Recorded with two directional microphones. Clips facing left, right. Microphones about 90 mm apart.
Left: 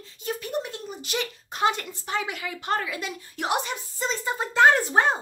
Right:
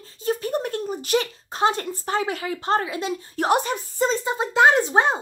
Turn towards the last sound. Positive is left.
turn(degrees=-20)  # may be behind; listen again after turning